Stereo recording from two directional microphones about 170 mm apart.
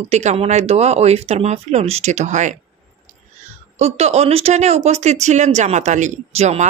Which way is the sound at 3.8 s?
40° right (ahead or behind).